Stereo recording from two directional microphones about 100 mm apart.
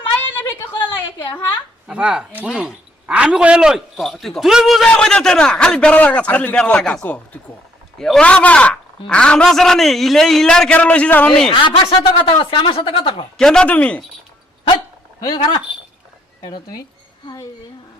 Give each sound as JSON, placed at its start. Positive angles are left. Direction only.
{"t": 0.2, "sound": "a sound", "side_deg": 20}
{"t": 1.9, "sound": "a man's voice", "side_deg": -10}
{"t": 11.6, "sound": "speech", "side_deg": 60}
{"t": 13.3, "sound": "a man's voice", "side_deg": 5}